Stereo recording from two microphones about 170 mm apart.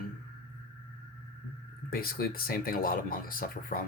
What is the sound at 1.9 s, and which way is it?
Speech, 60° left (ahead or behind).